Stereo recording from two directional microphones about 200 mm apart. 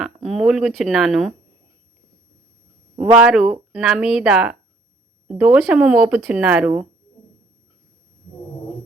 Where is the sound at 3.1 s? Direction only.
5° right (ahead or behind).